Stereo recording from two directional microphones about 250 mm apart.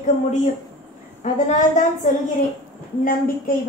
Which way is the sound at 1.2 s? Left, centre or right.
Left.